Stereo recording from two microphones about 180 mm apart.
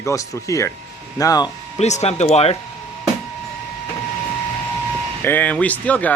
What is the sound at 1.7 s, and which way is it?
Speech, 40° left (ahead or behind).